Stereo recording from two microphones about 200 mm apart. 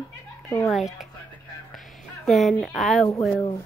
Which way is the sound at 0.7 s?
Centre (ahead or behind).